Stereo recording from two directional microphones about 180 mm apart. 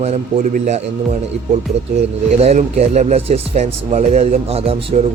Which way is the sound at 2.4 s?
35° right (ahead or behind).